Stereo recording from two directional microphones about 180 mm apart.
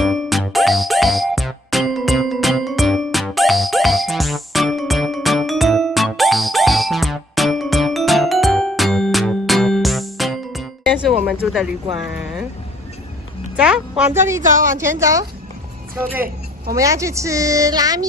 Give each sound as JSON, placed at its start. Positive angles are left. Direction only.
{"t": 0.0, "sound": "music", "side_deg": 0}
{"t": 11.4, "sound": "speech", "side_deg": 0}
{"t": 13.6, "sound": "speech", "side_deg": -5}
{"t": 14.4, "sound": "a woman's voice", "side_deg": -45}
{"t": 14.8, "sound": "speech", "side_deg": -15}
{"t": 16.7, "sound": "speech", "side_deg": -15}